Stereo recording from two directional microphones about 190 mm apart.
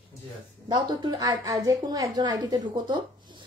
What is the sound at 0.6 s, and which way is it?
A woman's voice, 25° right (ahead or behind).